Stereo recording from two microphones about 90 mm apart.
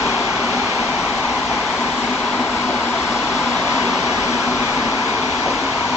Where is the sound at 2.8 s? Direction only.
30° left (ahead or behind).